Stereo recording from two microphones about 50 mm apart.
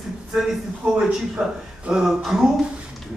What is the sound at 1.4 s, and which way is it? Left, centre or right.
Speech, centre.